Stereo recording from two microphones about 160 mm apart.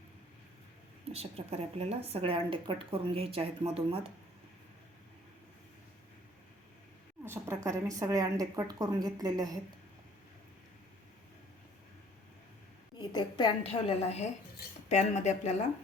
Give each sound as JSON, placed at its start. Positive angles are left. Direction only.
{"t": 1.1, "sound": "speech", "side_deg": -40}
{"t": 7.3, "sound": "speech", "side_deg": -15}
{"t": 13.0, "sound": "a woman's voice", "side_deg": 30}
{"t": 13.7, "sound": "a woman's voice", "side_deg": 40}